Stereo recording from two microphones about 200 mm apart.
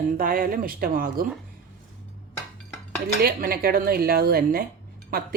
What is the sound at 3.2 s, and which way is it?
A woman's voice, 50° right (ahead or behind).